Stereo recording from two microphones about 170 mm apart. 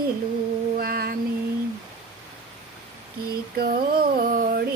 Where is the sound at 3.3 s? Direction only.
65° right (ahead or behind).